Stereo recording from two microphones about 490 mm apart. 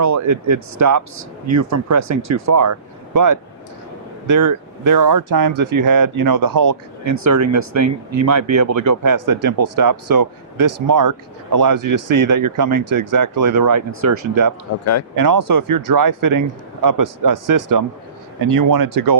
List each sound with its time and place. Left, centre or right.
0.0 s speech: right
4.3 s speech: right